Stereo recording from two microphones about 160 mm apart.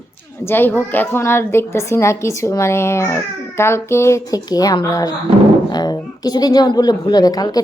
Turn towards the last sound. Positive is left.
turn(degrees=25)  # may be behind; listen again after turning